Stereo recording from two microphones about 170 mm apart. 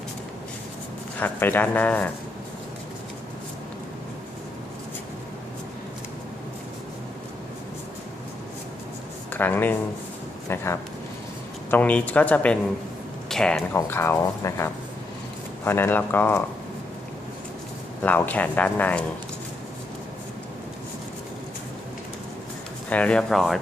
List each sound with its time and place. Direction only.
1.2 s speech: 10° left (ahead or behind)
9.3 s speech: 10° left (ahead or behind)
18.0 s speech: 10° left (ahead or behind)
22.9 s speech: 10° left (ahead or behind)